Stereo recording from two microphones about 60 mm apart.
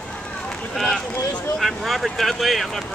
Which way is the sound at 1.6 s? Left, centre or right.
Centre.